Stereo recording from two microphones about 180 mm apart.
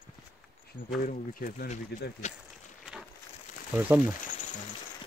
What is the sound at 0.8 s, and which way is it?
Speech, 55° left (ahead or behind).